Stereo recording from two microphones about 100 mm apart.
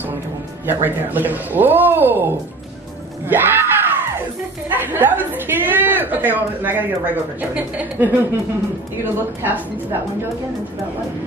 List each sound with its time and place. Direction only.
0.7 s a woman's voice: 20° right (ahead or behind)
3.3 s screaming: 20° right (ahead or behind)
4.6 s a woman's voice: 20° right (ahead or behind)